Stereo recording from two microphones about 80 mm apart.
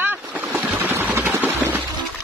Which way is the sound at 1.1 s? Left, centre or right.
Right.